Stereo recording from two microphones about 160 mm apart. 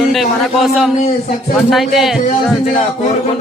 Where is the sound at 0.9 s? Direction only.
45° left (ahead or behind).